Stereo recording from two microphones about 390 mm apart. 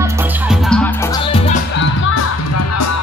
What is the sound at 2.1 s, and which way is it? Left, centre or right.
Music, left.